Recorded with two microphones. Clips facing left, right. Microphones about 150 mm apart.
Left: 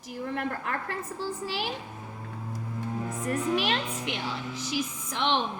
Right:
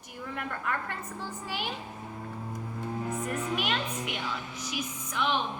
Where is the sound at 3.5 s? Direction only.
30° left (ahead or behind).